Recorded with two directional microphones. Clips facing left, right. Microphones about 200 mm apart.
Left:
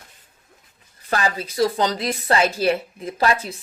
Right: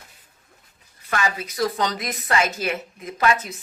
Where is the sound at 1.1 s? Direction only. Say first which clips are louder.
Left 2 dB; 35° left (ahead or behind).